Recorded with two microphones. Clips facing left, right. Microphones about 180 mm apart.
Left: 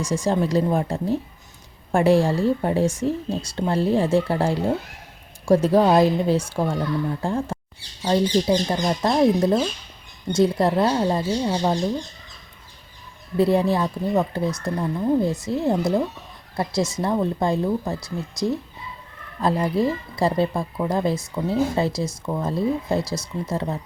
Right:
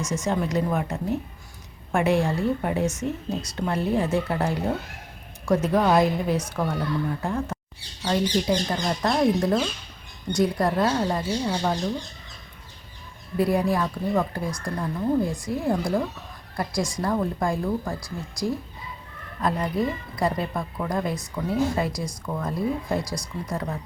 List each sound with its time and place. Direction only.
0.0 s speech: 30° left (ahead or behind)
13.3 s speech: 25° left (ahead or behind)